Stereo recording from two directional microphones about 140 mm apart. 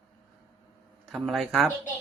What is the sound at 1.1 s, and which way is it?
Speech, centre (ahead or behind).